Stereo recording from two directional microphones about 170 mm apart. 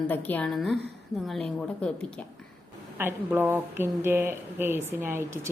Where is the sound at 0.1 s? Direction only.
10° left (ahead or behind).